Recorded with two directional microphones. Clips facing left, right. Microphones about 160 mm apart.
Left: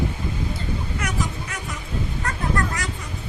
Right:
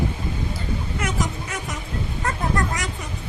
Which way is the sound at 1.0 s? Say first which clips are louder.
Right 3 dB; 20° right (ahead or behind).